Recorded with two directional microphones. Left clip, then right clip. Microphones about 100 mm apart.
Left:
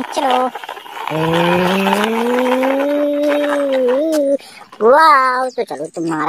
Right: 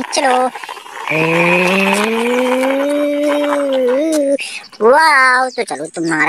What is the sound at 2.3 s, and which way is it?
Vehicle, 30° left (ahead or behind).